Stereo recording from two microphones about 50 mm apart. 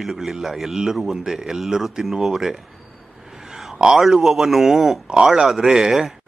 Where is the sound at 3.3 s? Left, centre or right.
Centre.